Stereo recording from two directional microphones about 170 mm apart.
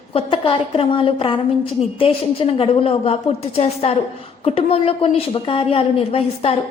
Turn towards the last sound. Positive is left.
turn(degrees=35)  # may be behind; listen again after turning